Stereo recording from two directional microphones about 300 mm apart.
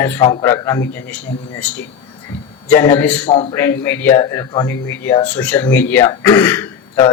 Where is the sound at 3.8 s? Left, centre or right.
Centre.